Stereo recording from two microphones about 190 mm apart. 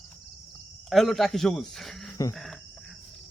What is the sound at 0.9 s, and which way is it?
Speech, centre (ahead or behind).